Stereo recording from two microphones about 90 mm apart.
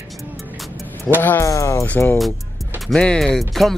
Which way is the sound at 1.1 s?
Centre (ahead or behind).